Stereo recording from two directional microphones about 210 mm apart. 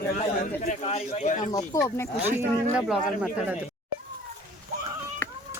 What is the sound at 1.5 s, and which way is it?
Speech, 15° left (ahead or behind).